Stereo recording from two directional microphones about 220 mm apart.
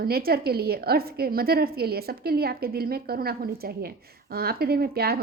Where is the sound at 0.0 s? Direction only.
45° right (ahead or behind).